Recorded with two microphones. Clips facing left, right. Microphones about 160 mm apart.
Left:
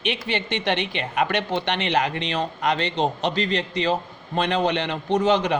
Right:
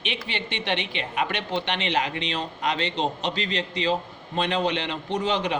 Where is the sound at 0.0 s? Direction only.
50° left (ahead or behind).